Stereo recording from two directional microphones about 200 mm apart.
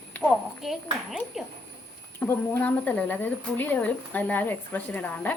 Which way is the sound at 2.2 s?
10° left (ahead or behind).